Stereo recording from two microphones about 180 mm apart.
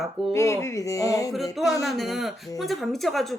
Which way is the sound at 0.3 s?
15° left (ahead or behind).